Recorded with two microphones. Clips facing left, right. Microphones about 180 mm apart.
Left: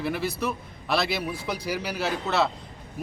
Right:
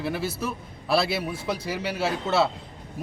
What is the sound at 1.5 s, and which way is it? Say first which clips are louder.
Speech: right 2 dB; 25° right (ahead or behind).